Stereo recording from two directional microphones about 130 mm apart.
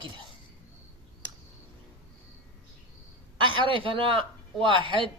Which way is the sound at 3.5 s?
40° right (ahead or behind).